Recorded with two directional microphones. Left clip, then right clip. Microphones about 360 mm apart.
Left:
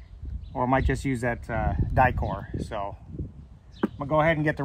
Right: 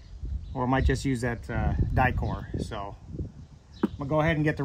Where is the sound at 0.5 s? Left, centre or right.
Centre.